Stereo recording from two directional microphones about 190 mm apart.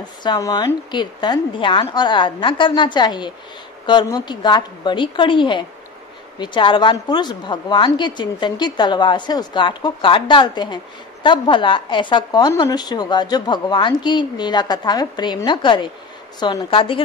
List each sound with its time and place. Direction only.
0.0 s a woman's voice: 25° left (ahead or behind)